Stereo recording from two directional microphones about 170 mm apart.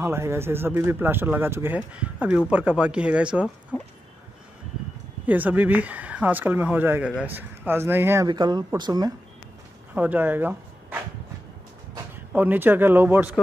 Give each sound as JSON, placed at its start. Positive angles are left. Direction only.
{"t": 0.0, "sound": "speech", "side_deg": -15}
{"t": 3.7, "sound": "a sound", "side_deg": -5}
{"t": 5.2, "sound": "speech", "side_deg": -10}
{"t": 8.3, "sound": "speech", "side_deg": -25}
{"t": 9.9, "sound": "speech", "side_deg": -10}
{"t": 12.3, "sound": "speech", "side_deg": -10}